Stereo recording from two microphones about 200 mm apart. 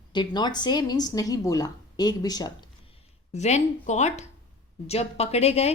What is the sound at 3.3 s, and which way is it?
A woman's voice, 35° left (ahead or behind).